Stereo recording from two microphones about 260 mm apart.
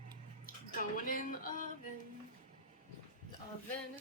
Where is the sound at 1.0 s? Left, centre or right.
Left.